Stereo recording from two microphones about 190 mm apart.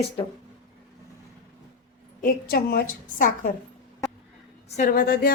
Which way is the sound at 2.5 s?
55° left (ahead or behind).